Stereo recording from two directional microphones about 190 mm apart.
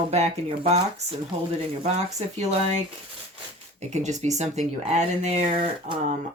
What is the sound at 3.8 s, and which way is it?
Speech, 35° right (ahead or behind).